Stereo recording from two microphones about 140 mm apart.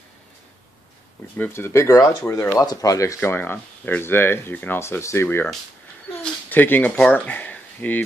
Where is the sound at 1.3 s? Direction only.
15° left (ahead or behind).